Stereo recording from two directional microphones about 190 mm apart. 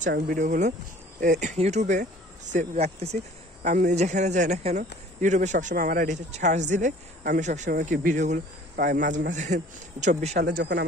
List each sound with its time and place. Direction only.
0.1 s speech: 45° right (ahead or behind)
10.4 s speech: 60° right (ahead or behind)